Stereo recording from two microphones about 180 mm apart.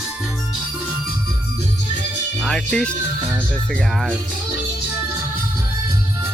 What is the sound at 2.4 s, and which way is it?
Speech, 5° left (ahead or behind).